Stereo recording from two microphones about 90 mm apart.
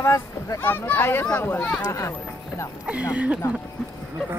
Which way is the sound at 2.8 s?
15° right (ahead or behind).